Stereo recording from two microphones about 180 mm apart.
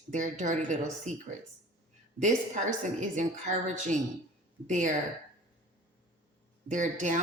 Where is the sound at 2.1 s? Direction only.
45° right (ahead or behind).